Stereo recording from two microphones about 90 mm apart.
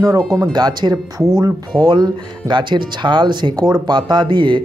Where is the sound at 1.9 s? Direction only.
50° right (ahead or behind).